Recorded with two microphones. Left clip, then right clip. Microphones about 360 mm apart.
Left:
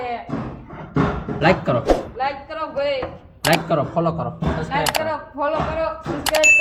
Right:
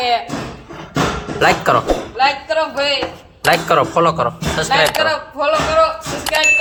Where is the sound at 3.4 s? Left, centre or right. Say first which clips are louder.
Right 4 dB; centre.